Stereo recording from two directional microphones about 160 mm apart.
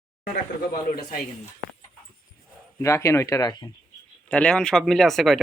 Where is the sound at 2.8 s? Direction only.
15° left (ahead or behind).